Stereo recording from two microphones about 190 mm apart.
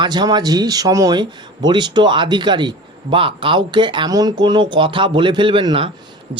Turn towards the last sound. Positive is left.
turn(degrees=-25)  # may be behind; listen again after turning